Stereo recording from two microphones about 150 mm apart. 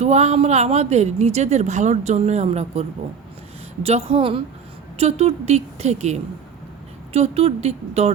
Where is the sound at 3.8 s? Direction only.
40° right (ahead or behind).